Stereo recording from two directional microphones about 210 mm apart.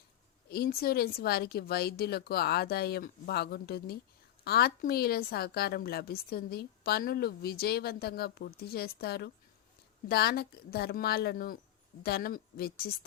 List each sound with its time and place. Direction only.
0.5 s a woman's voice: 45° left (ahead or behind)